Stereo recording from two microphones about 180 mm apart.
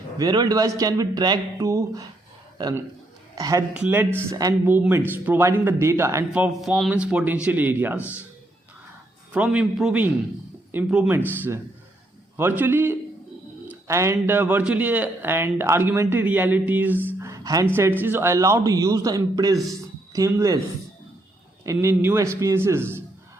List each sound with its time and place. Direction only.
0.2 s a man's voice: 20° right (ahead or behind)
9.3 s speech: 5° right (ahead or behind)
12.4 s speech: 10° right (ahead or behind)
21.6 s speech: 15° right (ahead or behind)